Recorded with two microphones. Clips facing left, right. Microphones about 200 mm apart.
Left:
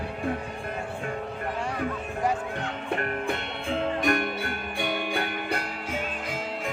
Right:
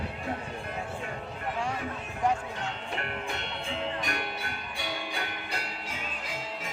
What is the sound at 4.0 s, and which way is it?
Music, 55° left (ahead or behind).